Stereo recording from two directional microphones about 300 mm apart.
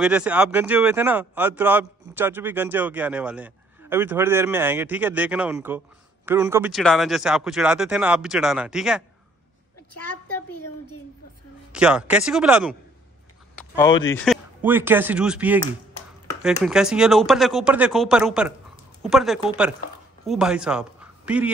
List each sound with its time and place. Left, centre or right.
0.0 s speech: centre
10.5 s speech: left
11.7 s speech: centre
13.6 s speech: centre
14.2 s a man's voice: centre